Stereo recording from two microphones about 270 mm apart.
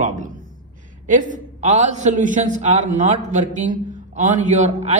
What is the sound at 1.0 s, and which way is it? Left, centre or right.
A woman's voice, right.